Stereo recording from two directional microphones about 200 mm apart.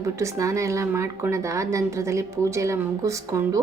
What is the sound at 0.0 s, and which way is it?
Speech, 15° right (ahead or behind).